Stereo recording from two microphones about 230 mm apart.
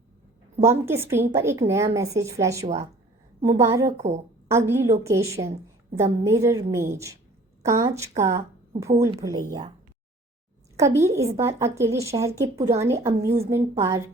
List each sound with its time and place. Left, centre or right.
0.6 s a woman's voice: centre
3.9 s a woman's voice: right
4.4 s a woman's voice: centre
5.9 s a woman's voice: right
6.2 s a woman's voice: centre
10.8 s a woman's voice: centre